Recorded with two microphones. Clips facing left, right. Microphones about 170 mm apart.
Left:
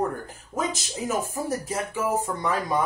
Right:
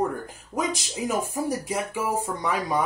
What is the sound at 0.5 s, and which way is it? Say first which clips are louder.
Speech: right 1 dB; 15° right (ahead or behind).